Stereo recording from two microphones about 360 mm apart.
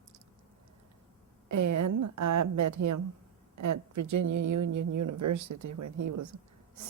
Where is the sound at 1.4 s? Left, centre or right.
Right.